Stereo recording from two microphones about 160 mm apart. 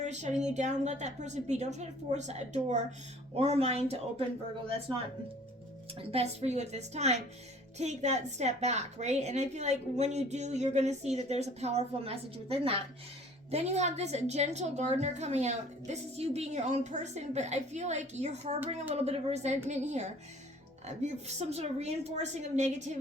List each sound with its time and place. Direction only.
0.0 s a woman's voice: 50° right (ahead or behind)
5.9 s a woman's voice: 40° right (ahead or behind)